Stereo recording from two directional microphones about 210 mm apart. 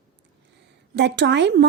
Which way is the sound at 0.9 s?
55° right (ahead or behind).